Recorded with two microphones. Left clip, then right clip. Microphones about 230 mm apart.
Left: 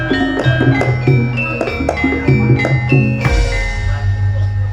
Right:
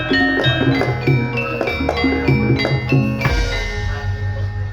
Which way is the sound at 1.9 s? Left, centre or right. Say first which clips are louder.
Left 3 dB; left.